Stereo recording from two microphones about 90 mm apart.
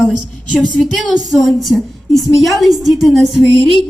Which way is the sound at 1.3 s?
Centre (ahead or behind).